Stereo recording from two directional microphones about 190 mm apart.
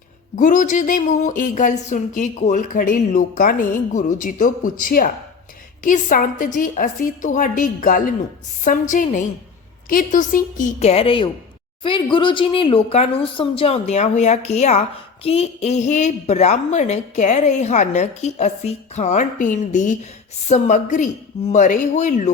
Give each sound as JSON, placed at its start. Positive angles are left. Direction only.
{"t": 0.3, "sound": "speech", "side_deg": 45}